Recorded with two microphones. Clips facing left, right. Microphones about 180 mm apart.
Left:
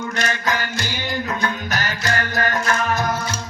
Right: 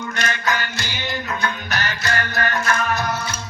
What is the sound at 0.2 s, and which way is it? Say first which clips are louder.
Music: even; 40° left (ahead or behind).